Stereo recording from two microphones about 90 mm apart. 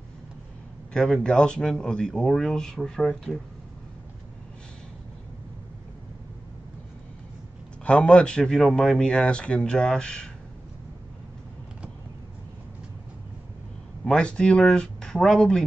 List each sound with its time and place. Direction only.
0.9 s speech: 10° left (ahead or behind)
7.8 s speech: 10° left (ahead or behind)
14.0 s speech: 10° left (ahead or behind)